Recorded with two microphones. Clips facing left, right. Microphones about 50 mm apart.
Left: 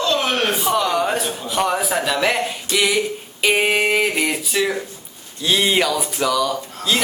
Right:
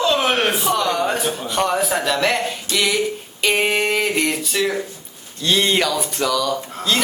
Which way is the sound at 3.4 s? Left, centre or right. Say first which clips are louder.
Left 1 dB; centre.